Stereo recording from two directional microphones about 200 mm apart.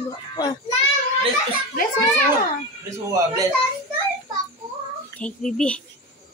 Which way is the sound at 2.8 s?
15° right (ahead or behind).